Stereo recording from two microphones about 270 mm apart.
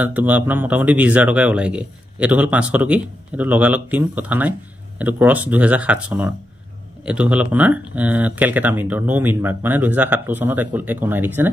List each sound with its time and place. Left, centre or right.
0.0 s speech: centre